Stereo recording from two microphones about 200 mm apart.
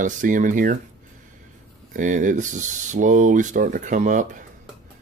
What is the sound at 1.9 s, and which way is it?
Speech, 40° right (ahead or behind).